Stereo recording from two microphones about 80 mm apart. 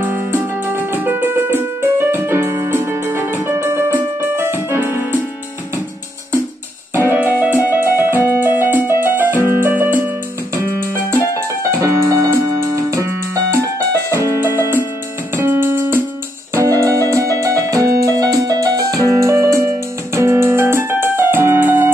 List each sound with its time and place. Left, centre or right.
0.0 s music: right
7.0 s keyboard: right
12.7 s music: right
14.4 s music: right
16.5 s keyboard: right
20.2 s music: right